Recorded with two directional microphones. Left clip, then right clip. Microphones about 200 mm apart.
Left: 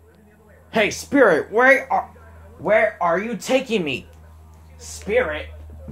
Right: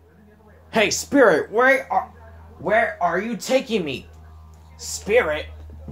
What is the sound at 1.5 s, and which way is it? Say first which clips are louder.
Speech: left 2 dB; 15° left (ahead or behind).